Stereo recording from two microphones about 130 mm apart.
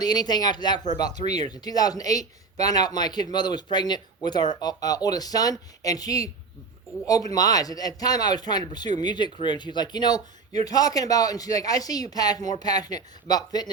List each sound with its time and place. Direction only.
0.0 s a man's voice: 30° left (ahead or behind)